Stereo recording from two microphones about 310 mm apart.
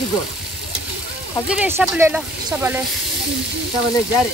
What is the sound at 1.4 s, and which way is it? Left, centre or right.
Speech, centre.